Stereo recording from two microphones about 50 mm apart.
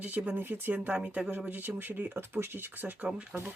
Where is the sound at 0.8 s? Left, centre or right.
Right.